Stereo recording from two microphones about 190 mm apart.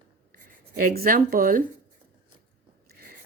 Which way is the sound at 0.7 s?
50° right (ahead or behind).